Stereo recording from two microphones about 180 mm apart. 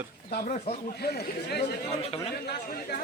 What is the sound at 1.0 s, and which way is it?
Speech, 60° left (ahead or behind).